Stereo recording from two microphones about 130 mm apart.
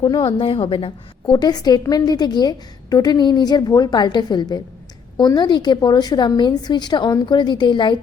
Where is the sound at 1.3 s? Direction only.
30° left (ahead or behind).